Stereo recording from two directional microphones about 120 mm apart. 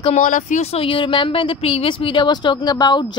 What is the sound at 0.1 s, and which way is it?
A woman's voice, 90° left.